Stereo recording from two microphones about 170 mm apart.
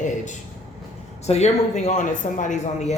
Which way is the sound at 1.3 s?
40° left (ahead or behind).